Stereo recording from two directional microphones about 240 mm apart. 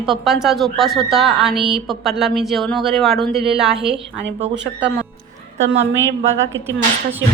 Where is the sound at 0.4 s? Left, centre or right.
Centre.